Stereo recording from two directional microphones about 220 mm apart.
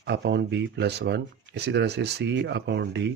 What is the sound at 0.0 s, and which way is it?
Speech, 50° right (ahead or behind).